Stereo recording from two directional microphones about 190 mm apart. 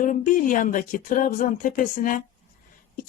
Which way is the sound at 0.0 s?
45° left (ahead or behind).